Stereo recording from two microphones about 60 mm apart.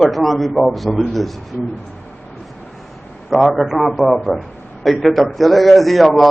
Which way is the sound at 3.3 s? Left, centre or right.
Centre.